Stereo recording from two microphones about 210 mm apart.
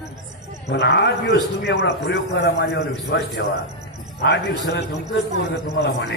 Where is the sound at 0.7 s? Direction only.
55° left (ahead or behind).